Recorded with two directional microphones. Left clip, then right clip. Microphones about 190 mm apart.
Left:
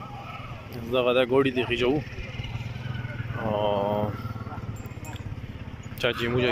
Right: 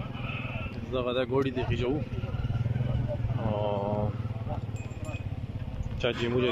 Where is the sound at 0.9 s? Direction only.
Centre (ahead or behind).